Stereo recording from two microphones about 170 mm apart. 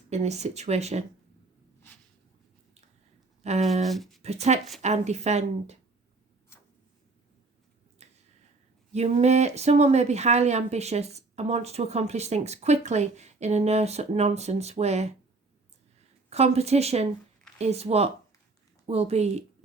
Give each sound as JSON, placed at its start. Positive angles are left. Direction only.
{"t": 0.1, "sound": "speech", "side_deg": -40}
{"t": 3.4, "sound": "speech", "side_deg": -40}
{"t": 3.8, "sound": "speech", "side_deg": 0}
{"t": 4.2, "sound": "speech", "side_deg": -40}
{"t": 8.0, "sound": "finger snapping", "side_deg": -40}
{"t": 8.9, "sound": "speech", "side_deg": -40}
{"t": 16.3, "sound": "speech", "side_deg": -40}